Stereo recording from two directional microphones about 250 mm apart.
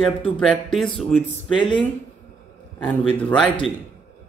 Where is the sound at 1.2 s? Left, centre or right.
Centre.